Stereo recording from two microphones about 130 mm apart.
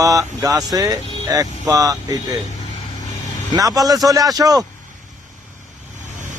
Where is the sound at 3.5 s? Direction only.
30° right (ahead or behind).